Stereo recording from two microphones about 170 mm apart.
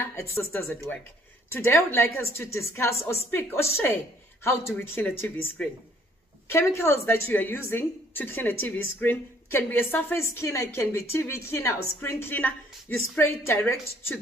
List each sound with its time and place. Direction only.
0.0 s a woman's voice: 15° left (ahead or behind)